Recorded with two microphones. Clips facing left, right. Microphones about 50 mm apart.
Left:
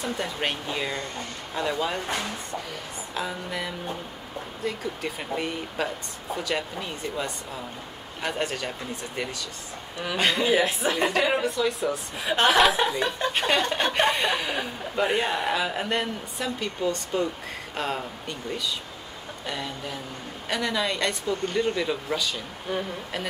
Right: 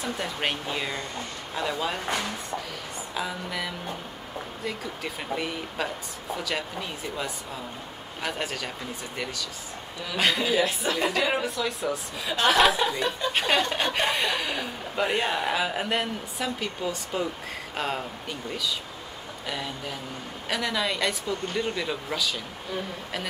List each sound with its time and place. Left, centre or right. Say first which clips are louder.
0.0 s speech: left 1 dB; centre
10.5 s a woman's voice: left 2 dB; left
11.1 s speech: left 2 dB; centre
12.2 s a woman's voice: left 6 dB; left
12.4 s speech: even; centre
19.4 s speech: even; centre